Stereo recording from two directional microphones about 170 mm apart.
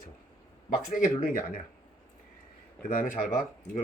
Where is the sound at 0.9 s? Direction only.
55° left (ahead or behind).